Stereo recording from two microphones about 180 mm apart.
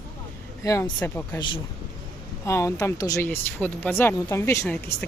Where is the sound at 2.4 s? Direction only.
15° left (ahead or behind).